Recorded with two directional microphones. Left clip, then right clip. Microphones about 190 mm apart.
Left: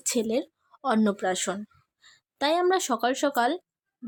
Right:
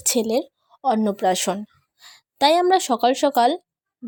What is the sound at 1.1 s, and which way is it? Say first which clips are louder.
A woman's voice: right 7 dB; 25° right (ahead or behind).